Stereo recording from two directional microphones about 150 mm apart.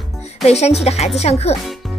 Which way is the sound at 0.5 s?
45° left (ahead or behind).